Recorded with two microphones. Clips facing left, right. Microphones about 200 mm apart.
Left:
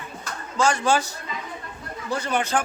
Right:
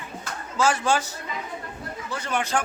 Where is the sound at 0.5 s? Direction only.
5° right (ahead or behind).